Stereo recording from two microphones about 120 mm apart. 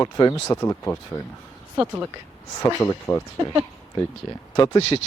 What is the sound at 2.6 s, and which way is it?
Speech, 20° left (ahead or behind).